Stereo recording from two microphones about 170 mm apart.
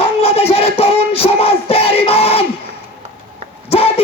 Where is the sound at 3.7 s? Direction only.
35° left (ahead or behind).